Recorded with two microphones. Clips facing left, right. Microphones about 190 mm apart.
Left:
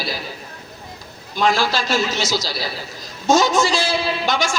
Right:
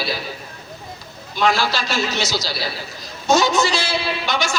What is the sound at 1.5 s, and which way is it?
Speech, 50° left (ahead or behind).